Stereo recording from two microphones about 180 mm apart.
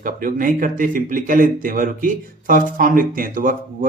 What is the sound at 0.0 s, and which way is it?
A man's voice, 50° right (ahead or behind).